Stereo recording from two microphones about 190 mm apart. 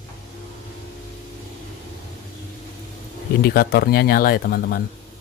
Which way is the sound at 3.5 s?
55° left (ahead or behind).